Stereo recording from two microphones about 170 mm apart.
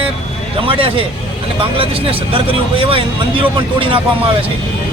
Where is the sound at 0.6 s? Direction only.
30° right (ahead or behind).